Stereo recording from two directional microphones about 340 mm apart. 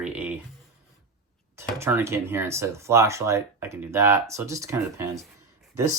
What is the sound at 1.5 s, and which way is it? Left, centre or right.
Speech, centre.